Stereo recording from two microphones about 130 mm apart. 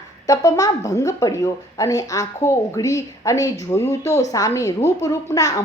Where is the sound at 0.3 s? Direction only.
25° left (ahead or behind).